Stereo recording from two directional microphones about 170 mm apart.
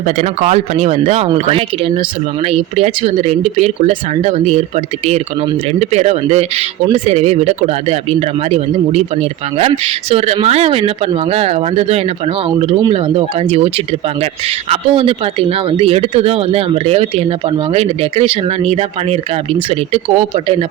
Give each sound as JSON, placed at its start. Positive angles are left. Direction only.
{"t": 0.0, "sound": "speech", "side_deg": -40}
{"t": 5.8, "sound": "speech", "side_deg": -40}